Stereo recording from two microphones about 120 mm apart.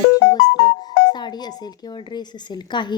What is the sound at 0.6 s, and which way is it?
Speech, 35° left (ahead or behind).